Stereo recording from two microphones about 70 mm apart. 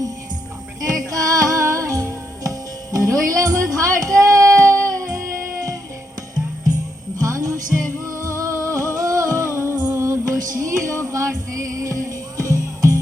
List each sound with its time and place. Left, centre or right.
0.8 s music: right
7.2 s music: right